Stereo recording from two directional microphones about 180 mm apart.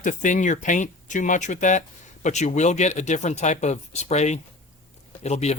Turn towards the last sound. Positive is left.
turn(degrees=40)  # may be behind; listen again after turning